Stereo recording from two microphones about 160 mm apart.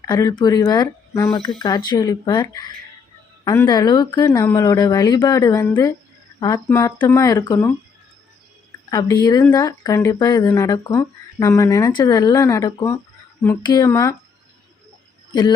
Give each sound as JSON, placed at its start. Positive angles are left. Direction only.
{"t": 0.0, "sound": "a woman's voice", "side_deg": 20}
{"t": 8.9, "sound": "speech", "side_deg": 20}
{"t": 15.3, "sound": "speech", "side_deg": 25}